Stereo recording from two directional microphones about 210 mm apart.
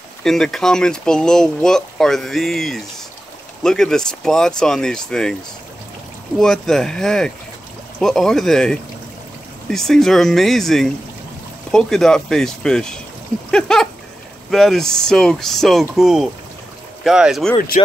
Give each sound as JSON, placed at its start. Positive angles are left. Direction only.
{"t": 0.2, "sound": "speech", "side_deg": 0}
{"t": 6.4, "sound": "speech", "side_deg": 0}
{"t": 17.6, "sound": "speech", "side_deg": 35}